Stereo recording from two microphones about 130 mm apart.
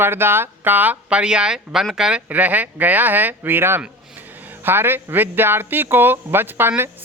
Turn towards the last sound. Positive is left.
turn(degrees=-15)  # may be behind; listen again after turning